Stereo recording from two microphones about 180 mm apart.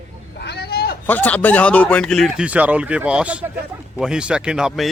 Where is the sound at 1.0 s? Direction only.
10° left (ahead or behind).